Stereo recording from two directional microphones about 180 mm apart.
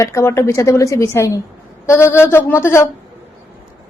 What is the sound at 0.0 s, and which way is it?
A woman's voice, 15° left (ahead or behind).